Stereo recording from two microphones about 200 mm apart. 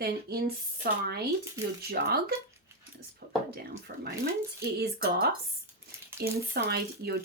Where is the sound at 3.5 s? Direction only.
50° right (ahead or behind).